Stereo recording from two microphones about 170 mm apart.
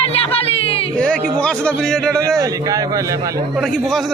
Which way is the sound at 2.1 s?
15° right (ahead or behind).